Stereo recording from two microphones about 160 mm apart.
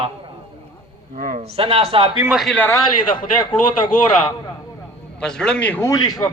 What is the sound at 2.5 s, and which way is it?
Speech, 10° left (ahead or behind).